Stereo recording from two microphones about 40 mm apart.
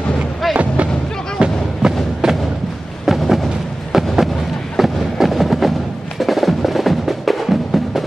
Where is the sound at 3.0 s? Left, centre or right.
Centre.